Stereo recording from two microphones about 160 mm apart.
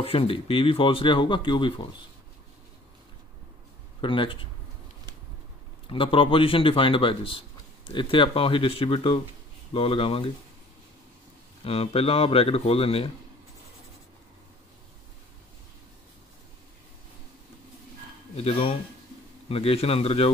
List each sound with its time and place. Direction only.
0.0 s a man's voice: 35° left (ahead or behind)
4.0 s a man's voice: 30° left (ahead or behind)
5.9 s a man's voice: 35° left (ahead or behind)
11.6 s a man's voice: 35° left (ahead or behind)
18.3 s a man's voice: 40° left (ahead or behind)